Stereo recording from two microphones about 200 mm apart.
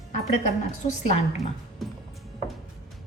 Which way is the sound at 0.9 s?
40° left (ahead or behind).